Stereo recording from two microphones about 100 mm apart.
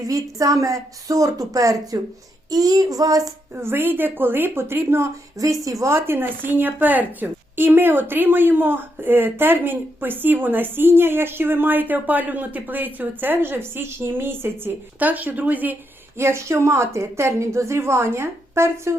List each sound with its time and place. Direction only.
0.0 s speech: 35° right (ahead or behind)
3.5 s speech: 25° right (ahead or behind)